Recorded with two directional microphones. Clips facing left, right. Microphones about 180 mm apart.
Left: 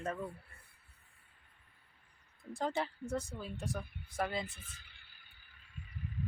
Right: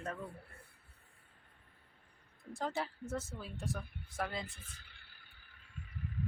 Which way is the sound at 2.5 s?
Centre (ahead or behind).